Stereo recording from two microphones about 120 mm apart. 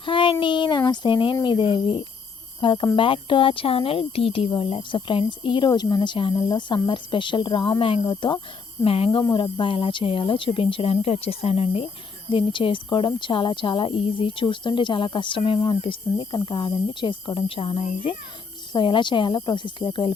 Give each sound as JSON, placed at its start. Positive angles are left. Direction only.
{"t": 0.0, "sound": "child singing", "side_deg": 45}
{"t": 0.9, "sound": "a sound", "side_deg": 40}
{"t": 2.6, "sound": "speech", "side_deg": 45}
{"t": 9.0, "sound": "speech", "side_deg": 40}